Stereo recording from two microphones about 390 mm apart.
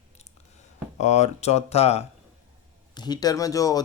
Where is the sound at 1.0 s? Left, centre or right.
Centre.